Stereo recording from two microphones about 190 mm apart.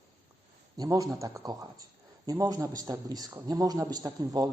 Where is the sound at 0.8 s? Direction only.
15° right (ahead or behind).